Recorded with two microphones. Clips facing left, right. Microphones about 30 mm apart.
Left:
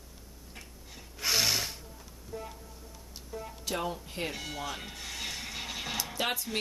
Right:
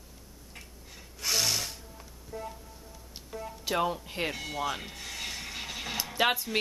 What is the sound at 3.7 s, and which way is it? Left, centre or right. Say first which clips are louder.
Speech: right 5 dB; centre.